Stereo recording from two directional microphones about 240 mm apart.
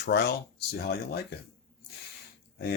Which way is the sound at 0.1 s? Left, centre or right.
Left.